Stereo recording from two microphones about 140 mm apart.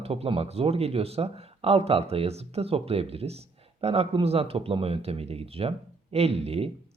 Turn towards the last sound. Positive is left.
turn(degrees=-45)  # may be behind; listen again after turning